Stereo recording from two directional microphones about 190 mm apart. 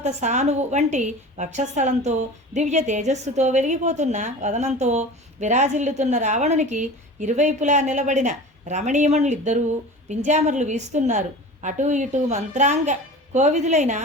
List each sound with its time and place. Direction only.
0.0 s a woman's voice: 35° right (ahead or behind)